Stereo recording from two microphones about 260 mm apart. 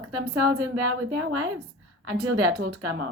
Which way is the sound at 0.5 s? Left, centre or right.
Right.